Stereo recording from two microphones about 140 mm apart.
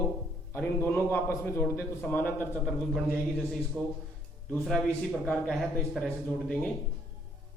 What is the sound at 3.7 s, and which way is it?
Speech, 15° right (ahead or behind).